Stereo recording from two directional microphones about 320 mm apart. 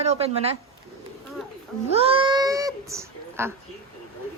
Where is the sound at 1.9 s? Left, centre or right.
Centre.